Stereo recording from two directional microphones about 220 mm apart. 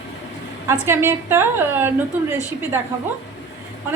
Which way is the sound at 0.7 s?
10° right (ahead or behind).